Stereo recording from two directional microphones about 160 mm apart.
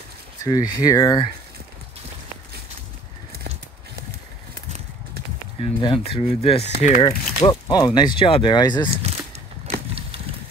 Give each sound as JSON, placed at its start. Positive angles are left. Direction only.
{"t": 0.4, "sound": "speech", "side_deg": 25}
{"t": 5.6, "sound": "speech", "side_deg": 35}
{"t": 7.1, "sound": "speech", "side_deg": 25}